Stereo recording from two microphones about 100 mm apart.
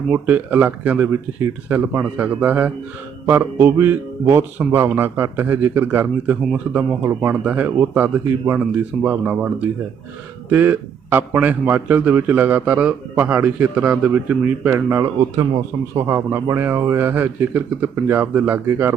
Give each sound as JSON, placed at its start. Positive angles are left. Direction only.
{"t": 0.1, "sound": "a man's voice", "side_deg": -15}
{"t": 7.0, "sound": "a man's voice", "side_deg": -25}